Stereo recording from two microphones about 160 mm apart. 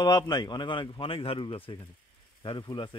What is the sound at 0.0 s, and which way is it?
Speech, 25° left (ahead or behind).